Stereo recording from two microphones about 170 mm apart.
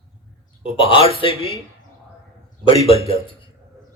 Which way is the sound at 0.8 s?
30° left (ahead or behind).